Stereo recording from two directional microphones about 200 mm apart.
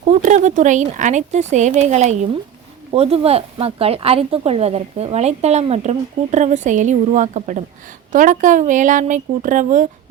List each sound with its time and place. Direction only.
0.0 s speech: 35° right (ahead or behind)